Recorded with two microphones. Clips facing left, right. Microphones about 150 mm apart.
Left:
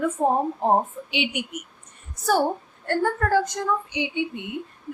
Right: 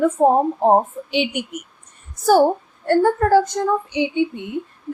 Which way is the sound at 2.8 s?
30° right (ahead or behind).